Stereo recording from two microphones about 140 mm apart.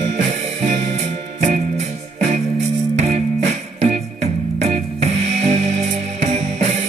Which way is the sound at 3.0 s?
55° right (ahead or behind).